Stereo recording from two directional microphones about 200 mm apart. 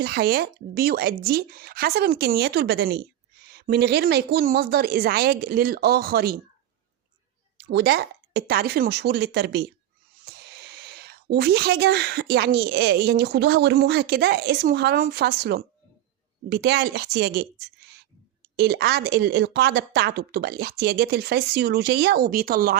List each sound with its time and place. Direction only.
0.0 s speech: 50° right (ahead or behind)
7.6 s a woman's voice: 55° right (ahead or behind)